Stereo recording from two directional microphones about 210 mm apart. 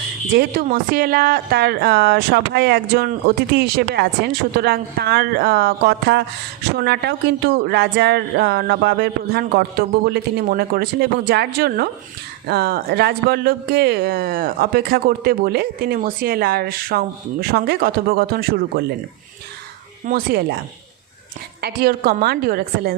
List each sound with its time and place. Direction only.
0.3 s a woman's voice: 45° right (ahead or behind)
20.1 s a woman's voice: 45° right (ahead or behind)
21.6 s a woman's voice: 45° right (ahead or behind)